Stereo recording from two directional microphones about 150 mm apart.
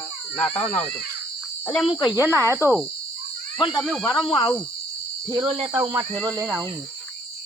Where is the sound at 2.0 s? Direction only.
25° left (ahead or behind).